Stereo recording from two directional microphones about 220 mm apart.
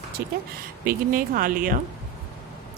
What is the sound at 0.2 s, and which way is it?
Speech, 45° right (ahead or behind).